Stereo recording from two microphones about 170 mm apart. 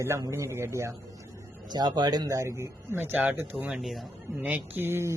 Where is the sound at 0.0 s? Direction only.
15° right (ahead or behind).